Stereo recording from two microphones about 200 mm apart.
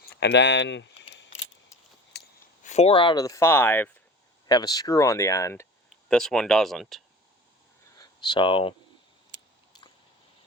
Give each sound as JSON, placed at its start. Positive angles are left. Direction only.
{"t": 0.0, "sound": "speech", "side_deg": 55}
{"t": 2.1, "sound": "a sound", "side_deg": 55}
{"t": 2.6, "sound": "speech", "side_deg": 30}
{"t": 6.1, "sound": "speech", "side_deg": 5}
{"t": 7.9, "sound": "speech", "side_deg": 20}